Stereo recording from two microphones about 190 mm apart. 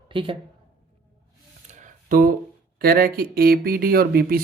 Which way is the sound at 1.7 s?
40° right (ahead or behind).